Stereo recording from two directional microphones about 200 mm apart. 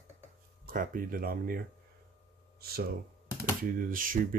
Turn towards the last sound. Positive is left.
turn(degrees=-45)  # may be behind; listen again after turning